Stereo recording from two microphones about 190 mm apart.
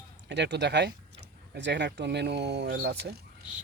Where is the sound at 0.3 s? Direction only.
65° right (ahead or behind).